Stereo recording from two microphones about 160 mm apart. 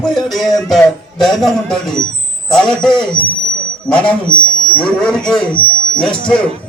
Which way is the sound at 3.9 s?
5° left (ahead or behind).